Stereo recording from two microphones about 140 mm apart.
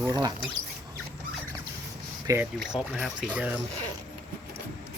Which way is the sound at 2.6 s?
5° right (ahead or behind).